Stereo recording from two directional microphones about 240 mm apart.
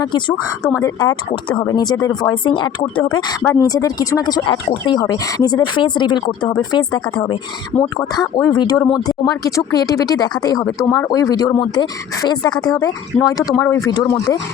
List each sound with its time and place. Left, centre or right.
0.1 s speech: centre